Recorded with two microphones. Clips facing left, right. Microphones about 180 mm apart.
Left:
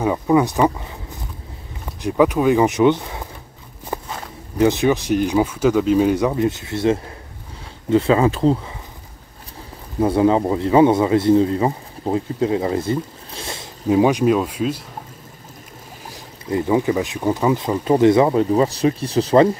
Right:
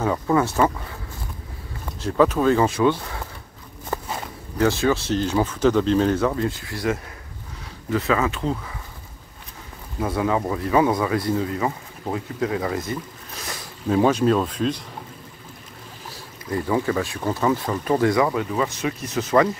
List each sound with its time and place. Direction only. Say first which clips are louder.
0.0 s speech: left 4 dB; 15° left (ahead or behind)
2.0 s speech: left 2 dB; 15° left (ahead or behind)
3.9 s walk: left 1 dB; 15° left (ahead or behind)
4.6 s speech: left 4 dB; 20° left (ahead or behind); by 8.7 s 35° left (ahead or behind)
9.9 s speech: left 7 dB; 30° left (ahead or behind)
13.8 s speech: left 3 dB; 15° left (ahead or behind)
16.1 s speech: left 5 dB; 20° left (ahead or behind)